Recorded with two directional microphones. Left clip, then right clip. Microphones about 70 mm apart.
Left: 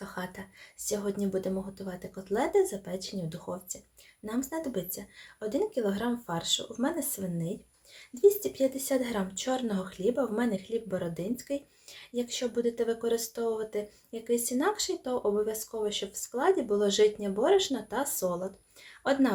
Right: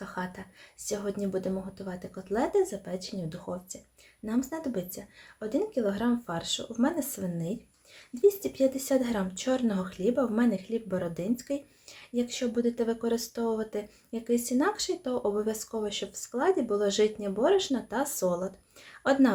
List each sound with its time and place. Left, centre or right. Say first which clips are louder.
0.0 s a sound: right 2 dB; right
0.9 s speech: even; right
7.1 s speech: right 1 dB; right
8.2 s speech: even; right
13.7 s speech: left 1 dB; right
18.0 s speech: right 4 dB; right